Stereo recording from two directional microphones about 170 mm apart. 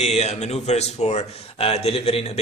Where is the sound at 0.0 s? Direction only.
40° left (ahead or behind).